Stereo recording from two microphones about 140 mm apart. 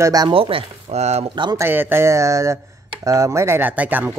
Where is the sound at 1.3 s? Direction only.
35° right (ahead or behind).